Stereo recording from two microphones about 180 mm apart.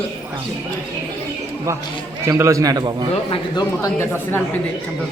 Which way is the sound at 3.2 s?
25° left (ahead or behind).